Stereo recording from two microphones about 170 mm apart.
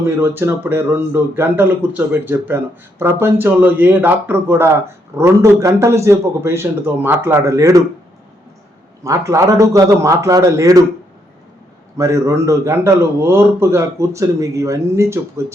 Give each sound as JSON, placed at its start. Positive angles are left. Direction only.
{"t": 0.0, "sound": "a man's voice", "side_deg": -10}
{"t": 9.0, "sound": "a man's voice", "side_deg": -20}
{"t": 11.9, "sound": "a man's voice", "side_deg": -20}